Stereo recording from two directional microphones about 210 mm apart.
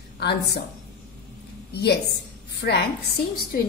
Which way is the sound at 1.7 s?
50° left (ahead or behind).